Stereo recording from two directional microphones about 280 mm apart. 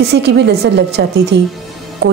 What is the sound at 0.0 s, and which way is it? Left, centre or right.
A woman's voice, right.